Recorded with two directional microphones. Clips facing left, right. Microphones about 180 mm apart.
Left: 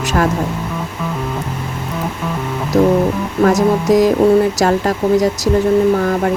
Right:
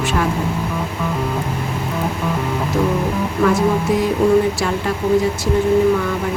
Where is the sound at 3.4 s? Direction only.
40° left (ahead or behind).